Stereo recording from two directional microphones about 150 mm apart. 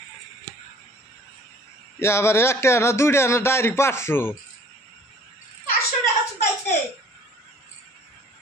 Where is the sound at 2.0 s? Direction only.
20° left (ahead or behind).